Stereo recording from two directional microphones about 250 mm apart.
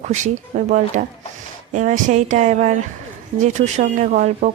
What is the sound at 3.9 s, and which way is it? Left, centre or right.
Speech, right.